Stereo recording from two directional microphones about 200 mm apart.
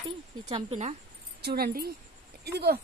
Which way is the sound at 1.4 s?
50° right (ahead or behind).